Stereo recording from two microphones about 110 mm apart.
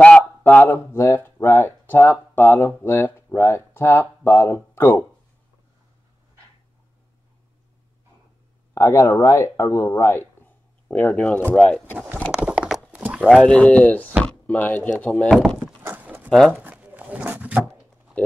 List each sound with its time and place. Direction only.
0.4 s speech: 20° left (ahead or behind)
8.7 s speech: 25° left (ahead or behind); by 12.0 s 10° left (ahead or behind)
12.3 s a sound: 10° right (ahead or behind)
13.3 s speech: 5° left (ahead or behind)
15.3 s speech: 5° right (ahead or behind)
15.8 s livestock: 15° right (ahead or behind)
16.3 s speech: 5° left (ahead or behind)
16.5 s a sound: 15° right (ahead or behind)